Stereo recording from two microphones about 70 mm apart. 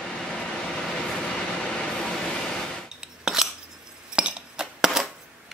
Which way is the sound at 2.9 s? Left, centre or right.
Centre.